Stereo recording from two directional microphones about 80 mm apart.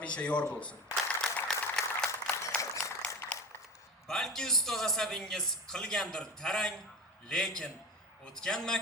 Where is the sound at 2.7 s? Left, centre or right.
Left.